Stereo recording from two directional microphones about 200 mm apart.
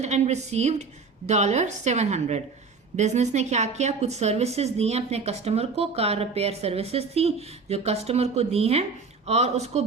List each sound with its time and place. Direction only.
0.0 s speech: 35° right (ahead or behind)